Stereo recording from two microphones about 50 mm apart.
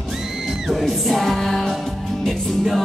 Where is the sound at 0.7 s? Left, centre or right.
Centre.